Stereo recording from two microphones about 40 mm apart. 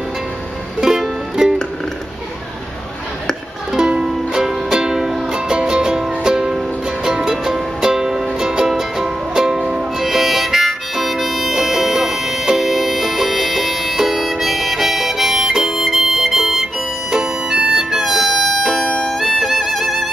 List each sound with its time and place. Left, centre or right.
0.7 s music: centre
4.0 s music: centre
18.0 s music: centre
18.9 s music: centre
19.1 s music: centre